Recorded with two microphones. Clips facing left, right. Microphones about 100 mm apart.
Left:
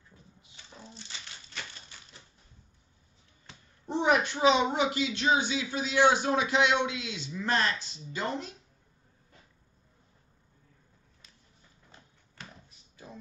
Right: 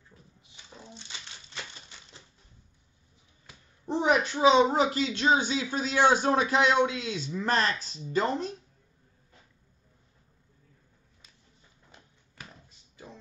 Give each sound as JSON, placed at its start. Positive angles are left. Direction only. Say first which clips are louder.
{"t": 0.9, "sound": "crumpling", "louder": "right 1 dB", "side_deg": -20}
{"t": 4.3, "sound": "a woman's voice", "louder": "right 3 dB", "side_deg": -25}
{"t": 4.6, "sound": "speech", "louder": "right 3 dB", "side_deg": -35}